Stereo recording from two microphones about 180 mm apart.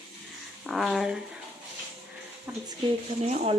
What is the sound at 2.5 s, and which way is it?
Speech, 5° right (ahead or behind).